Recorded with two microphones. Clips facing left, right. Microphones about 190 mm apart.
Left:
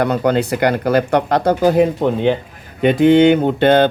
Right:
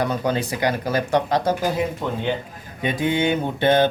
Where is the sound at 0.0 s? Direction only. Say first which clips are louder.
Left 7 dB; 65° left (ahead or behind).